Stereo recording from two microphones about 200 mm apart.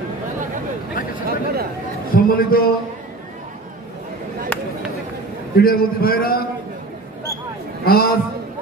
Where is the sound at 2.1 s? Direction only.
45° left (ahead or behind).